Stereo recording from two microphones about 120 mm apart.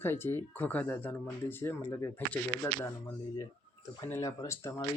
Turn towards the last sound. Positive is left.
turn(degrees=25)  # may be behind; listen again after turning